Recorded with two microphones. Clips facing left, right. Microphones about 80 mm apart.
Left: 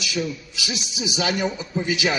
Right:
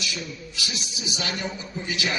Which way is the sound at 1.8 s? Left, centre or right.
Centre.